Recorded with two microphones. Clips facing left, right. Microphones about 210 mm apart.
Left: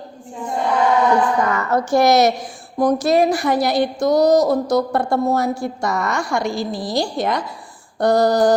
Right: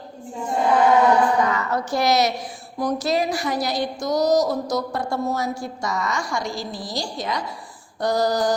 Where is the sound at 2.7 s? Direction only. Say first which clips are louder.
Left 7 dB; 50° left (ahead or behind).